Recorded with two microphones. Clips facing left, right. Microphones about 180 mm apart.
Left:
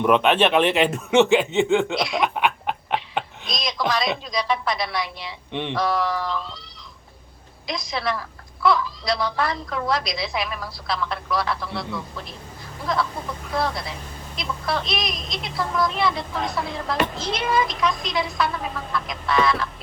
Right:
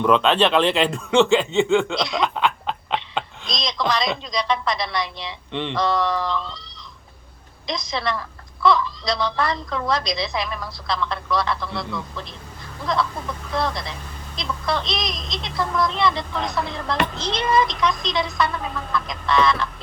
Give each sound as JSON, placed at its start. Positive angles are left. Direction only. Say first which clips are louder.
{"t": 0.0, "sound": "speech", "louder": "even", "side_deg": 20}
{"t": 2.1, "sound": "snicker", "louder": "right 1 dB", "side_deg": 20}
{"t": 3.5, "sound": "a woman's voice", "louder": "right 1 dB", "side_deg": 5}
{"t": 7.7, "sound": "a woman's voice", "louder": "right 1 dB", "side_deg": 5}
{"t": 13.5, "sound": "a woman's voice", "louder": "even", "side_deg": 5}